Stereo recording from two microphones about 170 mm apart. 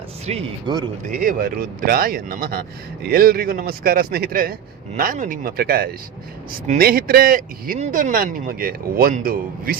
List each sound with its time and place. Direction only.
0.3 s speech: 40° right (ahead or behind)
1.1 s speech: 55° right (ahead or behind)